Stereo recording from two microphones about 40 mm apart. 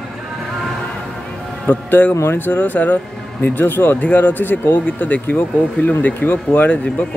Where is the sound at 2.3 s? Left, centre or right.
Left.